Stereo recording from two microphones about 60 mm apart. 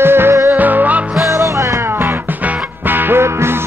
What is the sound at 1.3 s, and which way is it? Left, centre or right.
Music, right.